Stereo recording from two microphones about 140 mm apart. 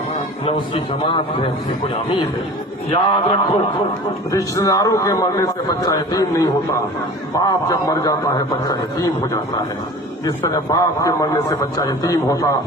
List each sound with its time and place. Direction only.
0.4 s a man's voice: 40° left (ahead or behind)
2.9 s a man's voice: 35° left (ahead or behind)
4.3 s a man's voice: 25° left (ahead or behind)